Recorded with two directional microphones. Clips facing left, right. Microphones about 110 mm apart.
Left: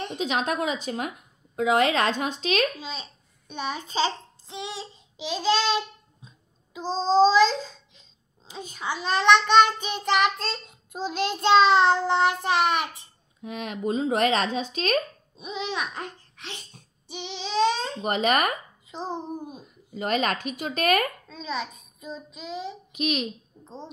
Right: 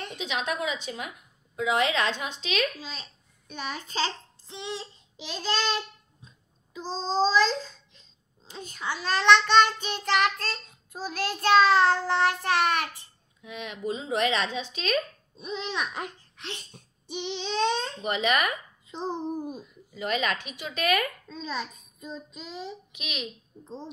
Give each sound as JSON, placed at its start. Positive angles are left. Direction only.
{"t": 0.2, "sound": "speech", "side_deg": 45}
{"t": 2.8, "sound": "a child's voice", "side_deg": 20}
{"t": 13.4, "sound": "speech", "side_deg": 45}
{"t": 15.3, "sound": "a child's voice", "side_deg": 10}
{"t": 18.0, "sound": "speech", "side_deg": 45}
{"t": 18.9, "sound": "child singing", "side_deg": 5}
{"t": 19.6, "sound": "speech", "side_deg": 45}
{"t": 21.4, "sound": "child singing", "side_deg": 0}
{"t": 22.9, "sound": "speech", "side_deg": 45}